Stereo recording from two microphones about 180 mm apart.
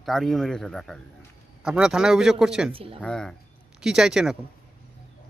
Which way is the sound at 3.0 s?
5° left (ahead or behind).